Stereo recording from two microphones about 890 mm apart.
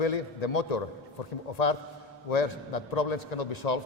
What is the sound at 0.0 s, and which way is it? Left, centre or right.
A man's voice, left.